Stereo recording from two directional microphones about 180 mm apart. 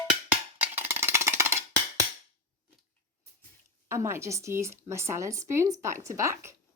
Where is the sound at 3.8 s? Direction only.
15° right (ahead or behind).